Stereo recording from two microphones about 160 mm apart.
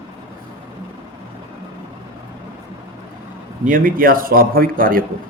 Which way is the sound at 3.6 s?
60° right (ahead or behind).